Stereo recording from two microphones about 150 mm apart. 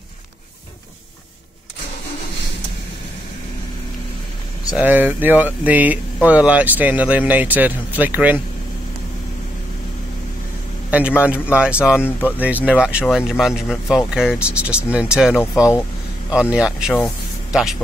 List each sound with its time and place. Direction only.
4.6 s speech: 10° right (ahead or behind)
10.9 s a man's voice: 10° right (ahead or behind)
12.0 s speech: 15° left (ahead or behind)
12.4 s speech: 10° right (ahead or behind)
15.3 s speech: 15° left (ahead or behind)
16.3 s speech: 5° right (ahead or behind)